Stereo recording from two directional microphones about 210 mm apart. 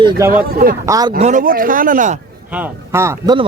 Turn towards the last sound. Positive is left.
turn(degrees=-10)  # may be behind; listen again after turning